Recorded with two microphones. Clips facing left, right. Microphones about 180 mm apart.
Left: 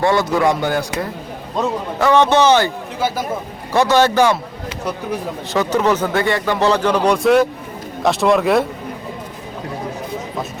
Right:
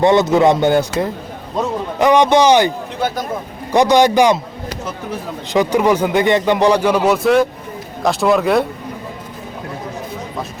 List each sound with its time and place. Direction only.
0.0 s speech: 20° right (ahead or behind)
1.6 s speech: centre (ahead or behind)
2.0 s speech: 15° right (ahead or behind)
5.5 s speech: 10° right (ahead or behind)